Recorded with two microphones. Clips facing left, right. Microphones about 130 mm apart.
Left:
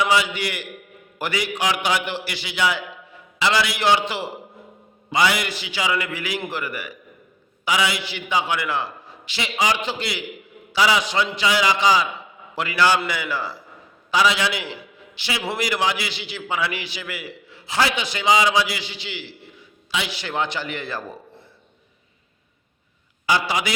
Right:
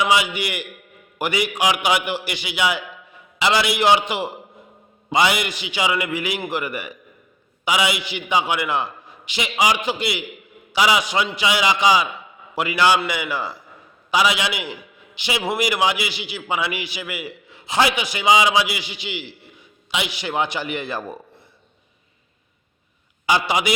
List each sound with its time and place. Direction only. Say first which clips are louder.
0.0 s a man's voice: right 1 dB; 15° right (ahead or behind)
23.2 s a man's voice: right 2 dB; 20° right (ahead or behind)